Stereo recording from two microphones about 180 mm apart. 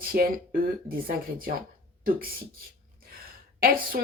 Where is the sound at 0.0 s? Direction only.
55° right (ahead or behind).